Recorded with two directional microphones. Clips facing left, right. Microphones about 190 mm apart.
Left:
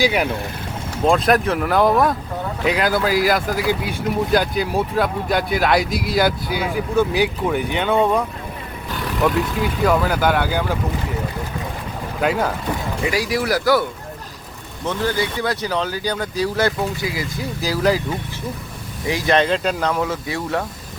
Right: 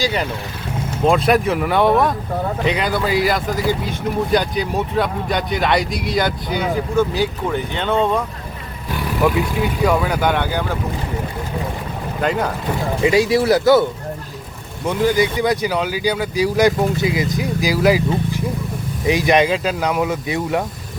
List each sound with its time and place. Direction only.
0.0 s speech: 10° left (ahead or behind)
1.0 s speech: centre (ahead or behind)
8.9 s speech: 5° right (ahead or behind)
12.2 s speech: 5° left (ahead or behind)
13.1 s speech: 25° right (ahead or behind)
14.8 s speech: 15° right (ahead or behind)
19.0 s speech: 15° right (ahead or behind)